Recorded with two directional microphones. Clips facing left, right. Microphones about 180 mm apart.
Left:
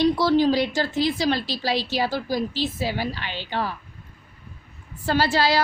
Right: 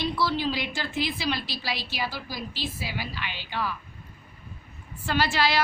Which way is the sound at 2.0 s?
50° left (ahead or behind).